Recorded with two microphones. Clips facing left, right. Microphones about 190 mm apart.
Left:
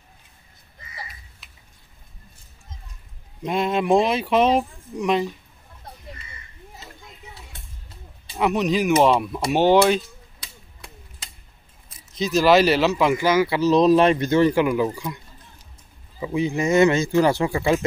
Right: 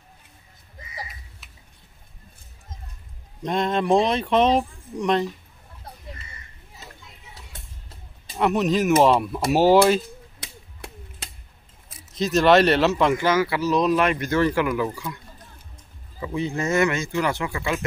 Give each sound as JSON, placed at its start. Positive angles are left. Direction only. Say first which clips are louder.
{"t": 3.4, "sound": "speech", "louder": "left 1 dB", "side_deg": 5}
{"t": 8.4, "sound": "speech", "louder": "even", "side_deg": 0}
{"t": 10.4, "sound": "a sound", "louder": "right 4 dB", "side_deg": -70}
{"t": 12.1, "sound": "speech", "louder": "even", "side_deg": 0}
{"t": 16.2, "sound": "speech", "louder": "left 3 dB", "side_deg": 15}
{"t": 16.8, "sound": "speech", "louder": "left 6 dB", "side_deg": 30}